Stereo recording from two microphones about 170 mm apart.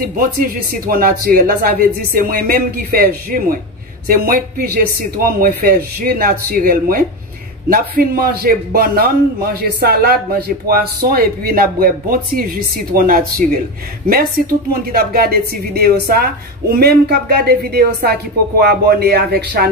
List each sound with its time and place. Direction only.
0.0 s a man's voice: 55° right (ahead or behind)